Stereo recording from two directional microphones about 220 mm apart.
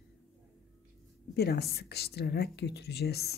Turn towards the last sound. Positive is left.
turn(degrees=45)  # may be behind; listen again after turning